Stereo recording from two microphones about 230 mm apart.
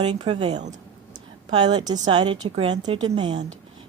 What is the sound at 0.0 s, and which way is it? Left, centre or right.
Speech, right.